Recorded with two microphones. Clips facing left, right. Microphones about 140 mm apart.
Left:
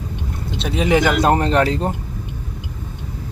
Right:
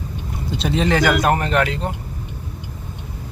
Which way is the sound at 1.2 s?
30° left (ahead or behind).